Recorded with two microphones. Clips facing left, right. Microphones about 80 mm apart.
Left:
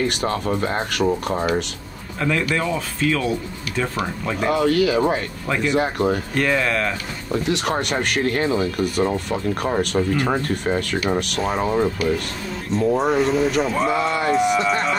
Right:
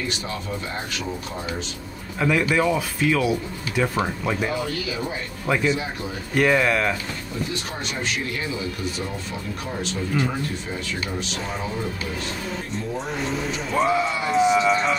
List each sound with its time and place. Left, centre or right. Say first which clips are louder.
0.0 s speech: left 8 dB; left
2.1 s a man's voice: right 1 dB; centre
4.5 s speech: left 9 dB; left
6.3 s speech: right 1 dB; centre
7.4 s speech: left 10 dB; left
13.2 s speech: left 9 dB; centre